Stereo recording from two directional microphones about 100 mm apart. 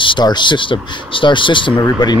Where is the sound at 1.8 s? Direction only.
40° left (ahead or behind).